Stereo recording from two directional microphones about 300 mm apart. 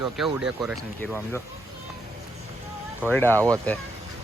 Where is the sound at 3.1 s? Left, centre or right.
Centre.